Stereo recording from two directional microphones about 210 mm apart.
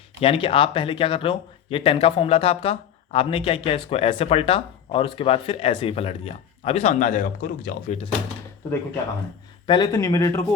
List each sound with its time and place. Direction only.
0.2 s speech: 25° left (ahead or behind); by 7.9 s 40° left (ahead or behind)
9.6 s speech: 20° left (ahead or behind)